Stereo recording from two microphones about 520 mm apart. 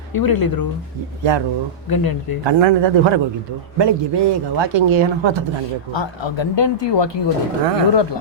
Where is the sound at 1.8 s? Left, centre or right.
Left.